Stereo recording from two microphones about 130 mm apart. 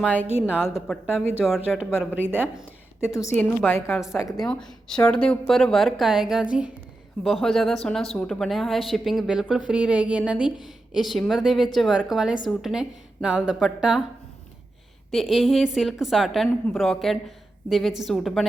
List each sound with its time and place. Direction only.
0.5 s a woman's voice: 15° left (ahead or behind)
1.5 s a woman's voice: centre (ahead or behind)
3.0 s a woman's voice: 20° left (ahead or behind)
4.0 s a woman's voice: centre (ahead or behind)
15.1 s a woman's voice: centre (ahead or behind)